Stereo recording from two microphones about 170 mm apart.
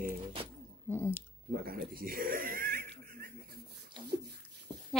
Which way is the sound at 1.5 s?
60° right (ahead or behind).